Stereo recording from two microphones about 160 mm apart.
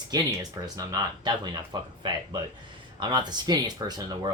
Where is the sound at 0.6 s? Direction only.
25° right (ahead or behind).